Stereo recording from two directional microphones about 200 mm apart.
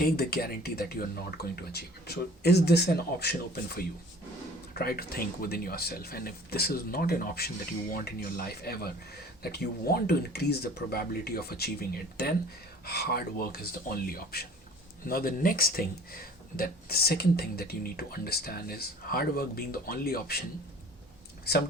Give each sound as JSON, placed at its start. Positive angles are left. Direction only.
{"t": 0.0, "sound": "speech", "side_deg": 50}